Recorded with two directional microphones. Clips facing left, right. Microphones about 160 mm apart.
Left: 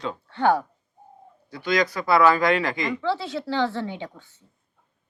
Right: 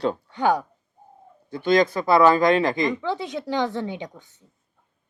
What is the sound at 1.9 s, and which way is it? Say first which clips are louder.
Speech: right 2 dB; 25° right (ahead or behind).